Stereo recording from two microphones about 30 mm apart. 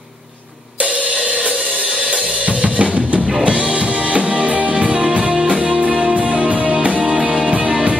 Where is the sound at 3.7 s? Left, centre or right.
Right.